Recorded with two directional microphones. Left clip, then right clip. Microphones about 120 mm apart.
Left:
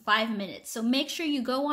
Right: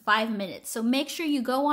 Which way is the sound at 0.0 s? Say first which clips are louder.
Right 1 dB; 35° right (ahead or behind).